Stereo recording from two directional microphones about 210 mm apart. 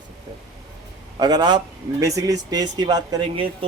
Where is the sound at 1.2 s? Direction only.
20° right (ahead or behind).